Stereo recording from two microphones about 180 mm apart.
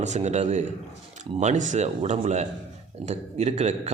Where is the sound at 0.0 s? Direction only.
40° right (ahead or behind).